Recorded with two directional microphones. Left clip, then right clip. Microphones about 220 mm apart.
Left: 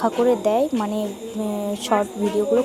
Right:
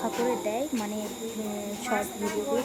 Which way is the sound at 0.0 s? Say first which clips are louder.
Left 9 dB; 15° left (ahead or behind).